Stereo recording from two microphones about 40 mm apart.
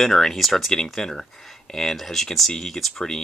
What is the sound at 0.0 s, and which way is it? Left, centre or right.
Speech, centre.